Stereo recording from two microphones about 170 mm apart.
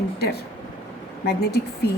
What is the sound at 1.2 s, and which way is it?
Speech, 70° left (ahead or behind).